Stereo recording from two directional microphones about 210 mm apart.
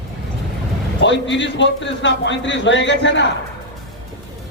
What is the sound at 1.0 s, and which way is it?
Speech, 60° left (ahead or behind).